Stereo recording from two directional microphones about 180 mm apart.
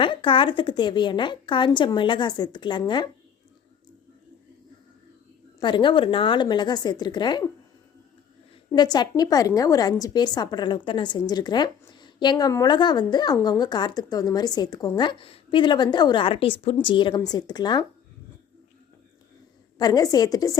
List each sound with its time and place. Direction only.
0.0 s a woman's voice: 30° left (ahead or behind)
5.5 s a woman's voice: 25° left (ahead or behind)
8.7 s a woman's voice: 25° left (ahead or behind)
19.8 s a woman's voice: 20° left (ahead or behind)